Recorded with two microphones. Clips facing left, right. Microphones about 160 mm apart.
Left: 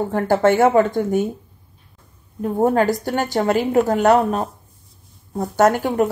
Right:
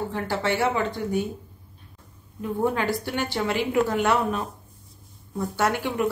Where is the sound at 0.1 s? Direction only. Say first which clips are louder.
Left 10 dB; 50° left (ahead or behind).